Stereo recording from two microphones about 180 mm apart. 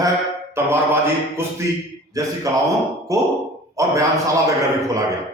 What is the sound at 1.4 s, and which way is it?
A man's voice, 15° right (ahead or behind).